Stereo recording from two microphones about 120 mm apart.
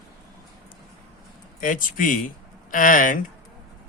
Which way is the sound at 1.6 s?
90° left.